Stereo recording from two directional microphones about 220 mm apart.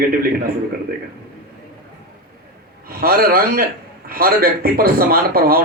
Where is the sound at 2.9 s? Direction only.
40° right (ahead or behind).